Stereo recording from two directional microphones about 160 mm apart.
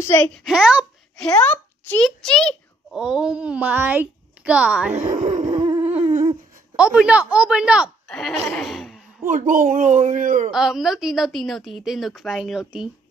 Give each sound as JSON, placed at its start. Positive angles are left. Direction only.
{"t": 0.0, "sound": "a woman's voice", "side_deg": 15}
{"t": 0.4, "sound": "a woman's voice", "side_deg": -5}
{"t": 1.4, "sound": "a child's voice", "side_deg": 10}
{"t": 4.9, "sound": "speech", "side_deg": -45}
{"t": 5.9, "sound": "humming", "side_deg": -40}
{"t": 6.8, "sound": "speech", "side_deg": -5}
{"t": 8.1, "sound": "a woman's voice", "side_deg": 5}
{"t": 8.5, "sound": "laughter", "side_deg": 0}
{"t": 9.2, "sound": "speech", "side_deg": -50}
{"t": 10.5, "sound": "a woman's voice", "side_deg": -5}